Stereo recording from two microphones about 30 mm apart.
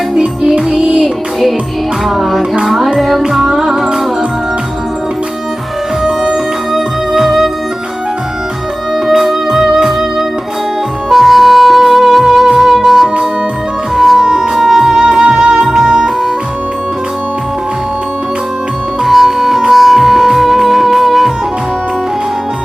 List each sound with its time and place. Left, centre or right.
1.0 s music: centre
6.7 s music: centre
9.2 s music: centre
14.3 s music: right
14.6 s music: centre
15.0 s music: right
15.7 s music: right
19.0 s music: centre